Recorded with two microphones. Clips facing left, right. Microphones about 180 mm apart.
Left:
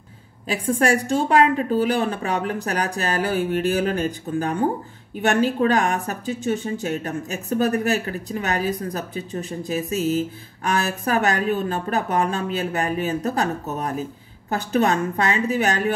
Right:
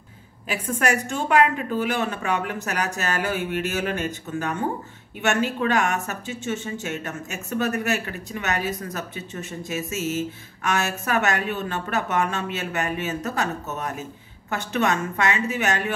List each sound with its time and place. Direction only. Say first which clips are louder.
0.5 s a woman's voice: left 4 dB; 30° left (ahead or behind)